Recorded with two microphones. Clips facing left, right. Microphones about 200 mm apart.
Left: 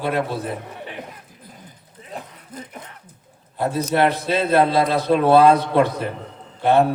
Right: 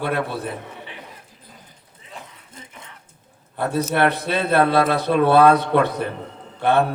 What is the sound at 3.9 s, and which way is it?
A man's voice, 60° right (ahead or behind).